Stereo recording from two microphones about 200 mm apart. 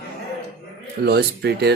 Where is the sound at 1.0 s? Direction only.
55° right (ahead or behind).